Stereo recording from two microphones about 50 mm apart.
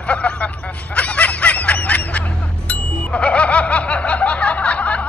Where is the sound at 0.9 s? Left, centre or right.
Left.